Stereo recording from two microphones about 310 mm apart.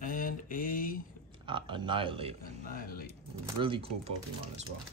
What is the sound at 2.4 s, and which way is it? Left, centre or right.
Speech, left.